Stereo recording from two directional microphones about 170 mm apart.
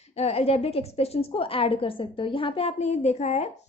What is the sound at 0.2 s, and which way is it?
A woman's voice, 35° left (ahead or behind).